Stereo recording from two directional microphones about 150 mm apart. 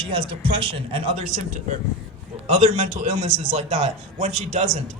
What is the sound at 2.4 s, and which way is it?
A man's voice, 45° right (ahead or behind).